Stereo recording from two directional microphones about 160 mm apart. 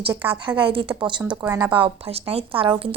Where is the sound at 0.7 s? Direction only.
30° right (ahead or behind).